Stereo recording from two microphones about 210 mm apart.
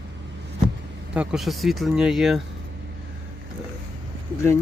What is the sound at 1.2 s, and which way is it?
Speech, centre (ahead or behind).